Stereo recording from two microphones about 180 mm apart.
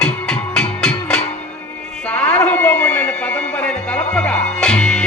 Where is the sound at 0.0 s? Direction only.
5° left (ahead or behind).